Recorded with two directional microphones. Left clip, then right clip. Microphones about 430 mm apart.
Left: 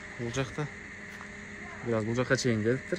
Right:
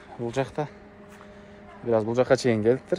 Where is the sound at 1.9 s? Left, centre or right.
Centre.